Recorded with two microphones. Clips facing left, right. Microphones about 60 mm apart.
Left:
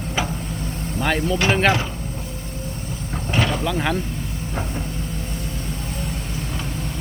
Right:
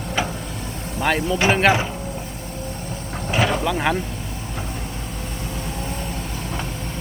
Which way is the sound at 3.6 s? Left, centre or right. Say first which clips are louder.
Right 1 dB; centre.